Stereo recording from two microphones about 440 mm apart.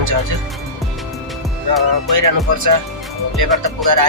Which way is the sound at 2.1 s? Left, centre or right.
Right.